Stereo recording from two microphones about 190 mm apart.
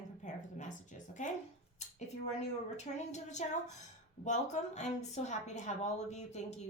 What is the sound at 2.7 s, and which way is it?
A woman's voice, 35° left (ahead or behind).